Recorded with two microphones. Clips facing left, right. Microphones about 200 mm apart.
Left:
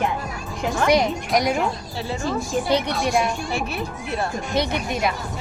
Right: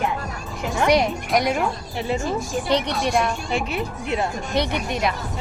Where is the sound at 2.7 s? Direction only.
5° left (ahead or behind).